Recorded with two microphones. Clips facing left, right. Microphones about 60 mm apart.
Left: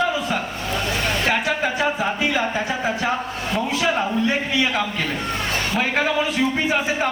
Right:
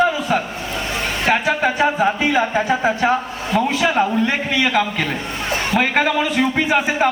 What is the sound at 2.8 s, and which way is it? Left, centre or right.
Speech, centre.